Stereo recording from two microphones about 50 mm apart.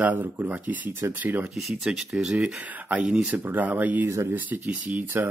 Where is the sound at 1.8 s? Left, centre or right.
Centre.